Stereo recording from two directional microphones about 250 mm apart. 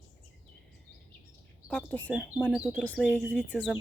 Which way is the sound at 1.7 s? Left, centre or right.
Centre.